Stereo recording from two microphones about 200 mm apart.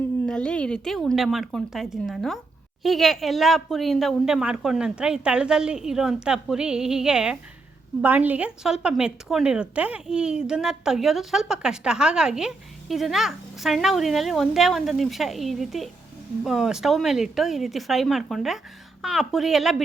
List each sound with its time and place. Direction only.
0.3 s speech: 5° left (ahead or behind)